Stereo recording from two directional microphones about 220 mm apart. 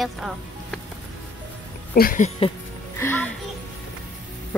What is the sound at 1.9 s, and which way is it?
Speech, 40° left (ahead or behind).